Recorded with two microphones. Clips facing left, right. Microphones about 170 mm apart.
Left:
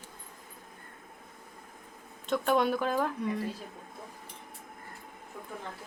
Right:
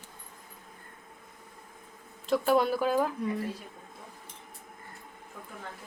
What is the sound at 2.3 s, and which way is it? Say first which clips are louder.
Speech: right 2 dB; 5° right (ahead or behind).